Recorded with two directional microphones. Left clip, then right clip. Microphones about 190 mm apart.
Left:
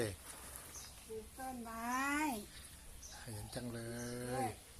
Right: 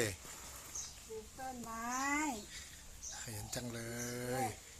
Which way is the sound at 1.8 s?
20° left (ahead or behind).